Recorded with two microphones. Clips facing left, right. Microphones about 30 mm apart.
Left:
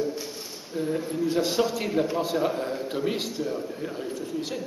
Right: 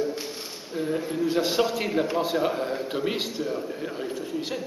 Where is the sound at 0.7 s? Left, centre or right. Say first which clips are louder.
Even; centre.